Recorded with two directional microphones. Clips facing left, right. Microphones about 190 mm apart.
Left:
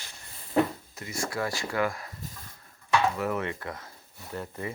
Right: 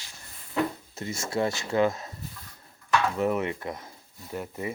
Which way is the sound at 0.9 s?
25° right (ahead or behind).